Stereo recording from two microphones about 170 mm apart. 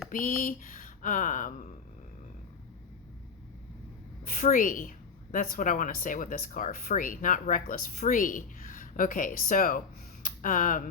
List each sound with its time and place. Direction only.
0.1 s a woman's voice: 50° left (ahead or behind)
4.3 s a woman's voice: 55° left (ahead or behind)